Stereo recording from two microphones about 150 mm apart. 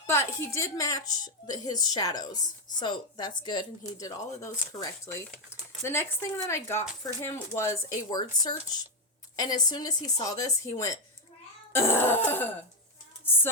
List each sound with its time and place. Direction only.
0.1 s a woman's voice: 15° left (ahead or behind)
11.7 s throat clearing: 15° left (ahead or behind)